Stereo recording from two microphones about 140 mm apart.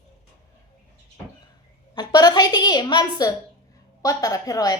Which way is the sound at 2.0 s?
30° left (ahead or behind).